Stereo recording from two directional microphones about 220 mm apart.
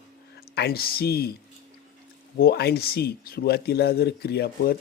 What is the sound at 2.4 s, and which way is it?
Speech, 45° left (ahead or behind).